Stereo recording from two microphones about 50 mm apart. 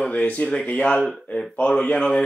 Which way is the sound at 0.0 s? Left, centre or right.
Left.